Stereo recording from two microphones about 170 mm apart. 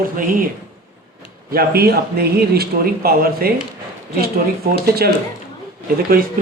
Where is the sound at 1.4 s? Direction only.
65° right (ahead or behind).